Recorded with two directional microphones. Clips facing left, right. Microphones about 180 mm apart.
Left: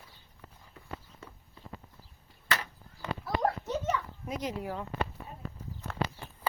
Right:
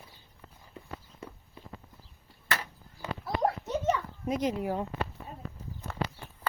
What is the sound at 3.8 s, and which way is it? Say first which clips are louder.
Children playing: right 4 dB; 25° right (ahead or behind).